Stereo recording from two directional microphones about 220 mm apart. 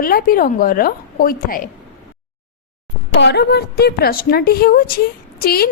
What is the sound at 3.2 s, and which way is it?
A woman's voice, 50° left (ahead or behind).